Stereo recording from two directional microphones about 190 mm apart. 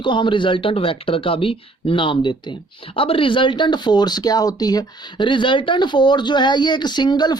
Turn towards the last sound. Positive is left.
turn(degrees=20)  # may be behind; listen again after turning